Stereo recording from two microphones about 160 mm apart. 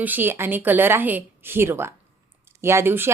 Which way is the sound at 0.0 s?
10° right (ahead or behind).